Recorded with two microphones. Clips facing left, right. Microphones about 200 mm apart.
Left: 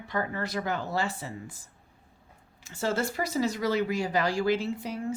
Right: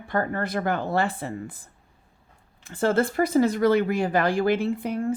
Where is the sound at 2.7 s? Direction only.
55° right (ahead or behind).